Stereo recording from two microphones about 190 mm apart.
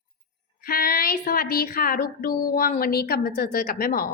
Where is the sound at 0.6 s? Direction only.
50° left (ahead or behind).